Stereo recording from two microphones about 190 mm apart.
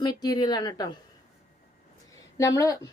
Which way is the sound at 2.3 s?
15° left (ahead or behind).